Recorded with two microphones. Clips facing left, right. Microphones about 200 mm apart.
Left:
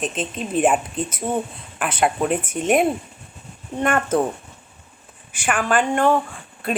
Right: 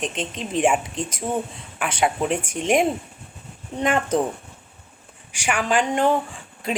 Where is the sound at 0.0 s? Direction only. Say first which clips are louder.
Left 2 dB; 10° left (ahead or behind).